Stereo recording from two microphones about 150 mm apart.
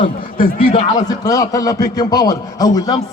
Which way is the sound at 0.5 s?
35° left (ahead or behind).